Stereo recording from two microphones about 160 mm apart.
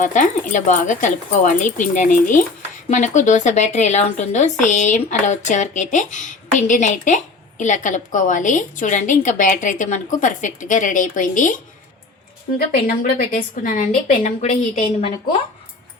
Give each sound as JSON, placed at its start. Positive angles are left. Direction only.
{"t": 0.0, "sound": "a woman's voice", "side_deg": 50}
{"t": 12.5, "sound": "a woman's voice", "side_deg": 65}